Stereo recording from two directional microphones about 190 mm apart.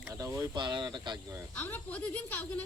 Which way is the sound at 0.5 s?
25° right (ahead or behind).